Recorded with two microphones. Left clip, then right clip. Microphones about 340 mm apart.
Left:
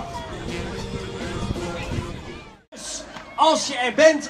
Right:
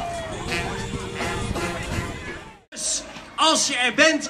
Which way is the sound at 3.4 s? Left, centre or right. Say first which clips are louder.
Left 1 dB; left.